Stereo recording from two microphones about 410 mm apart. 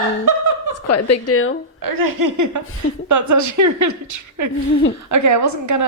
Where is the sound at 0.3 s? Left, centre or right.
Right.